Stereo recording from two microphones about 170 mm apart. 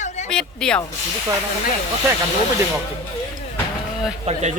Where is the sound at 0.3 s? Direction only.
5° left (ahead or behind).